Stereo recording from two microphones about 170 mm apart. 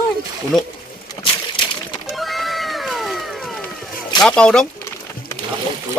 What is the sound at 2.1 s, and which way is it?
Cat, centre (ahead or behind).